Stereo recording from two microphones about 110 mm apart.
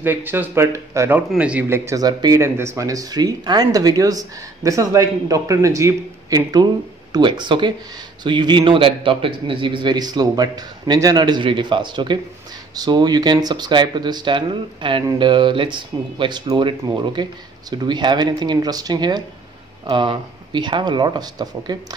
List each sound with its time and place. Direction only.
0.0 s speech: 20° right (ahead or behind)
1.3 s speech: 10° right (ahead or behind)
1.7 s speech: 30° right (ahead or behind)
2.4 s speech: 25° right (ahead or behind); by 21.7 s 40° right (ahead or behind)